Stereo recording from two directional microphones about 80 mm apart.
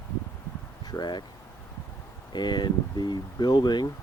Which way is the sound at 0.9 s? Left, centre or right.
Left.